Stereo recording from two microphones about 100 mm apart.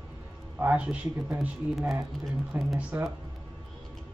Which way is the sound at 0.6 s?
15° right (ahead or behind).